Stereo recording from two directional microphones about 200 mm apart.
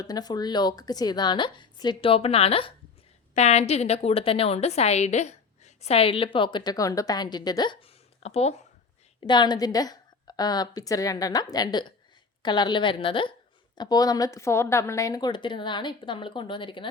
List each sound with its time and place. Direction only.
0.0 s a woman's voice: 20° left (ahead or behind)
9.2 s a woman's voice: 20° left (ahead or behind)